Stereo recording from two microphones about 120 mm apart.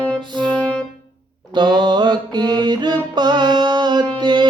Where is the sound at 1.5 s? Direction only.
40° right (ahead or behind).